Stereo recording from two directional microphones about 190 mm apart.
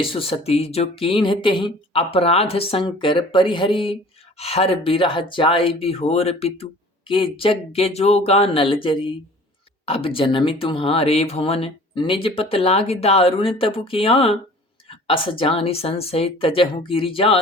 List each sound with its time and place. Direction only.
0.0 s speech: 30° left (ahead or behind)